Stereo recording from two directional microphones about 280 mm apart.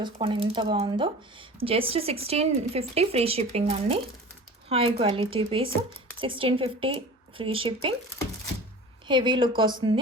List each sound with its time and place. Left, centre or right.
0.0 s speech: centre
9.0 s speech: centre